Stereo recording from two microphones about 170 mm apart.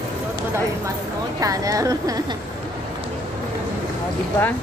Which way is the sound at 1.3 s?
20° right (ahead or behind).